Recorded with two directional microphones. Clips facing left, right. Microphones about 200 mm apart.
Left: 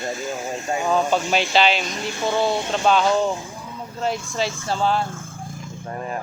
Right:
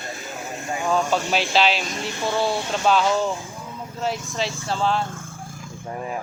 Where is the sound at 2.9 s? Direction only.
5° right (ahead or behind).